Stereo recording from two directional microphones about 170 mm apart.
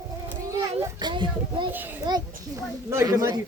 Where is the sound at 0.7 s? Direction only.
30° right (ahead or behind).